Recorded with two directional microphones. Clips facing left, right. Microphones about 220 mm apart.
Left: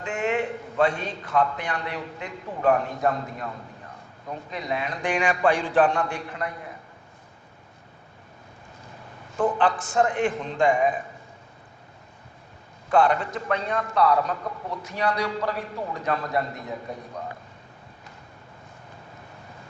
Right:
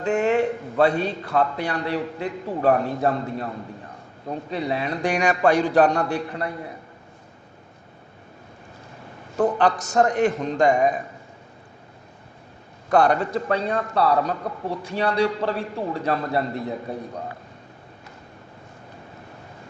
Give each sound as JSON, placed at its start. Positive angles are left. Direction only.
{"t": 0.0, "sound": "a man's voice", "side_deg": -40}
{"t": 9.4, "sound": "a man's voice", "side_deg": -40}
{"t": 12.9, "sound": "a man's voice", "side_deg": -40}